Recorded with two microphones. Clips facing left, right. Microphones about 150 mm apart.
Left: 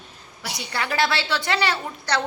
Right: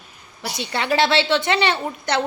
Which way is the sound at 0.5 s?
25° right (ahead or behind).